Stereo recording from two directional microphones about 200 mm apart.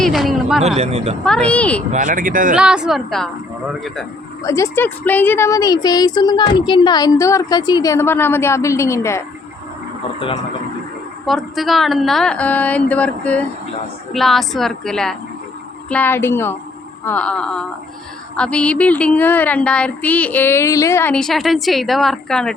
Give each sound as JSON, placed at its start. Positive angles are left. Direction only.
{"t": 0.0, "sound": "a sound", "side_deg": 0}
{"t": 0.6, "sound": "speech", "side_deg": -30}
{"t": 1.2, "sound": "a woman's voice", "side_deg": 5}
{"t": 1.9, "sound": "speech", "side_deg": -40}
{"t": 2.6, "sound": "speech", "side_deg": -5}
{"t": 4.4, "sound": "a woman's voice", "side_deg": 15}
{"t": 11.3, "sound": "a woman's voice", "side_deg": 0}